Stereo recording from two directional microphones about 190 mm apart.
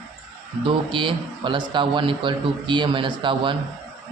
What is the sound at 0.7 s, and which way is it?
A man's voice, 25° right (ahead or behind).